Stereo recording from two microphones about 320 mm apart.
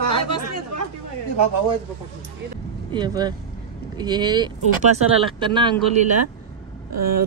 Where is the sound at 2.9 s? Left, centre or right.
Centre.